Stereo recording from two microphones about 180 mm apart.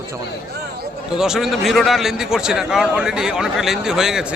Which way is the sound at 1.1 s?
5° right (ahead or behind).